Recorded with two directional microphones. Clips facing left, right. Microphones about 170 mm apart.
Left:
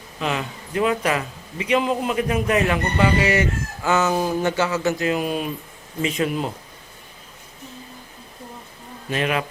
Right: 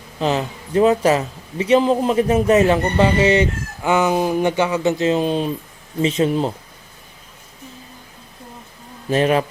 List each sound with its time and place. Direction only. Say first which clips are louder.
0.2 s a man's voice: right 5 dB; 30° right (ahead or behind)
9.0 s a man's voice: right 7 dB; 35° right (ahead or behind)